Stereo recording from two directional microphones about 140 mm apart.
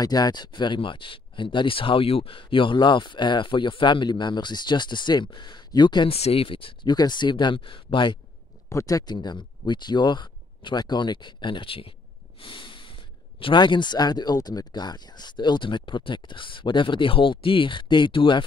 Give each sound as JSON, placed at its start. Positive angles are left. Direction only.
{"t": 0.0, "sound": "speech", "side_deg": 30}
{"t": 6.1, "sound": "speech", "side_deg": 45}
{"t": 8.6, "sound": "speech", "side_deg": 25}
{"t": 12.4, "sound": "snort", "side_deg": 35}
{"t": 13.4, "sound": "speech", "side_deg": 35}